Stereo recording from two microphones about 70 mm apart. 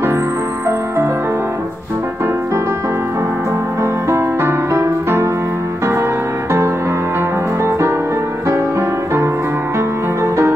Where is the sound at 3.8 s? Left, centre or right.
Right.